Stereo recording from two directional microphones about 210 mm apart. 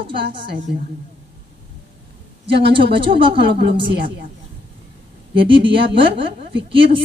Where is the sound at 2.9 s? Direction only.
25° right (ahead or behind).